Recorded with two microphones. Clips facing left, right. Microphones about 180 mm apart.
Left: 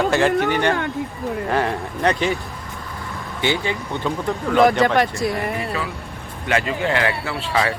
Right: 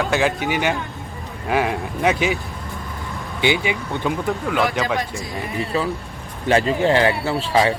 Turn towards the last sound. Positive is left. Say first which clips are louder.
# right 4 dB
turn(degrees=-25)  # may be behind; listen again after turning